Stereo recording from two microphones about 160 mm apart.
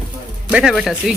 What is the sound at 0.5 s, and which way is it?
Speech, centre (ahead or behind).